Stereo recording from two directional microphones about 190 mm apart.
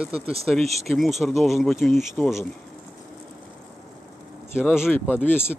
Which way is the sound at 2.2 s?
10° left (ahead or behind).